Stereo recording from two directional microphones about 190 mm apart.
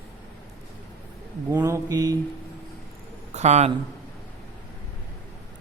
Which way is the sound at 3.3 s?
35° right (ahead or behind).